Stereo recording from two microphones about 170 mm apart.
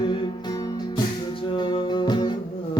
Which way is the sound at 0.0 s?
25° left (ahead or behind).